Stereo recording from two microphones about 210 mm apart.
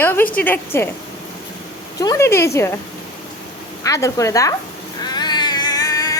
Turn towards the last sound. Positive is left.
turn(degrees=15)  # may be behind; listen again after turning